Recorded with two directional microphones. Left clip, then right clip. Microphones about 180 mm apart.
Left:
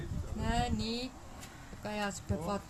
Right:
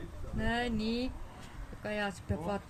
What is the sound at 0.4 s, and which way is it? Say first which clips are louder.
Speech: right 1 dB; 30° right (ahead or behind).